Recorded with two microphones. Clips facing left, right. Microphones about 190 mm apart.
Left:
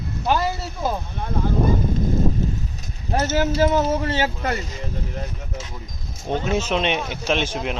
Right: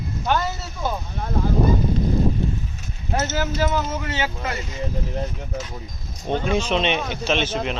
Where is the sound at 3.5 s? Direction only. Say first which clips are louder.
Left 5 dB; 30° left (ahead or behind).